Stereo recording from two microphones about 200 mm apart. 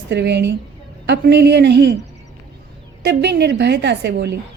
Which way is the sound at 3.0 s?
55° right (ahead or behind).